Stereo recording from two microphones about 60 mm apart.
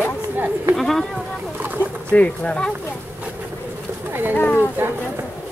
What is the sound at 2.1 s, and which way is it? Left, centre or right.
Speech, left.